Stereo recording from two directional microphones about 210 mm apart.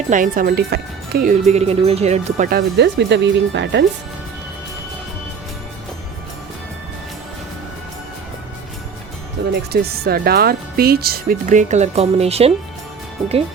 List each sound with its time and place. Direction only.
0.1 s speech: 40° right (ahead or behind)
1.5 s speech: 30° right (ahead or behind)
2.5 s speech: 50° right (ahead or behind)
9.4 s music: 55° right (ahead or behind)
9.7 s speech: 45° right (ahead or behind); by 12.5 s 30° right (ahead or behind)